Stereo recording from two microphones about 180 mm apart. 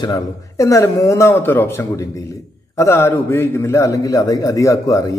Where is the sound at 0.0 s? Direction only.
20° left (ahead or behind).